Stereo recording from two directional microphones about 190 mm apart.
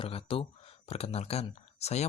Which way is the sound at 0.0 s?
30° left (ahead or behind).